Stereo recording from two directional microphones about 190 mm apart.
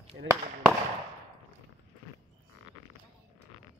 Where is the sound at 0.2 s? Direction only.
55° right (ahead or behind).